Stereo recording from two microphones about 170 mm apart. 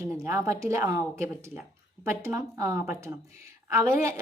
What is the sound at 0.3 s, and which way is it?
A woman's voice, 15° right (ahead or behind).